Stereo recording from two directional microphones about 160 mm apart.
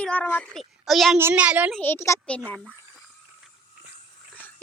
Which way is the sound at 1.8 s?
15° left (ahead or behind).